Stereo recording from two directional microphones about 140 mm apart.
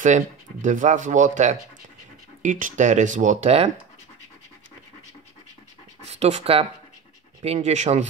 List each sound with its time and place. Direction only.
0.0 s speech: 65° right (ahead or behind)
6.0 s speech: 50° right (ahead or behind)